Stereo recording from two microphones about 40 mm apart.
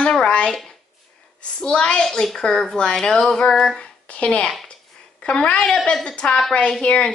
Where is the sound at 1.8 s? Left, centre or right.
Left.